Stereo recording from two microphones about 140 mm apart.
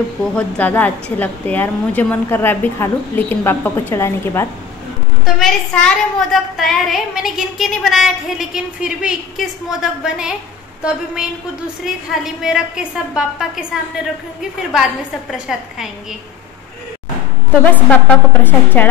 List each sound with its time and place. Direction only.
0.2 s a woman's voice: 10° left (ahead or behind)
5.2 s a woman's voice: centre (ahead or behind)
15.3 s a woman's voice: 5° right (ahead or behind)
17.6 s a woman's voice: 10° left (ahead or behind)